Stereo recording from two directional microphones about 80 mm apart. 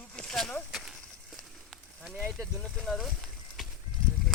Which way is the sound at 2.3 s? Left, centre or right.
Centre.